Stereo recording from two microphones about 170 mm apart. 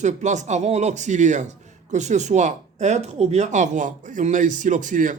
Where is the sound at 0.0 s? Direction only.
45° right (ahead or behind).